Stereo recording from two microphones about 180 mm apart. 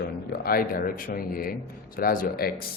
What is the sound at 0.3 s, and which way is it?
Speech, 55° left (ahead or behind).